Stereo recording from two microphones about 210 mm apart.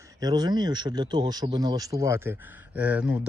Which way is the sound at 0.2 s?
20° right (ahead or behind).